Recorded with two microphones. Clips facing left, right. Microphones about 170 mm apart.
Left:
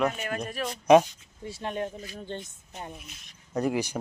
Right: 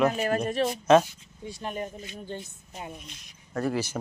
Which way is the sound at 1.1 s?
Centre (ahead or behind).